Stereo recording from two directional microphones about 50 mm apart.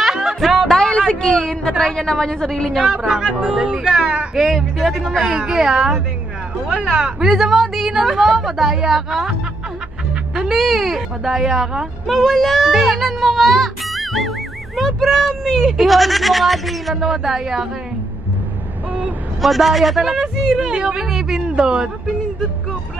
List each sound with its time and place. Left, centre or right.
0.0 s music: centre
0.7 s a sound: centre
3.0 s a woman's voice: centre
4.4 s a woman's voice: centre
5.3 s a woman's voice: centre
10.3 s music: centre
10.6 s a woman's voice: centre
19.4 s a woman's voice: centre